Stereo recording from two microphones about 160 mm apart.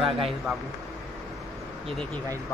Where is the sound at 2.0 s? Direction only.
10° left (ahead or behind).